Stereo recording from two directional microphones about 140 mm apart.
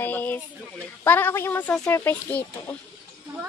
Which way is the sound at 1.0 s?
15° left (ahead or behind).